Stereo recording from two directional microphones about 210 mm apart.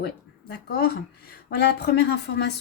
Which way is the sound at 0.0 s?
50° left (ahead or behind).